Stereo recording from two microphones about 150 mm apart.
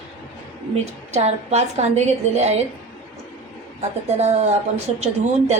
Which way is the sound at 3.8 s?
45° right (ahead or behind).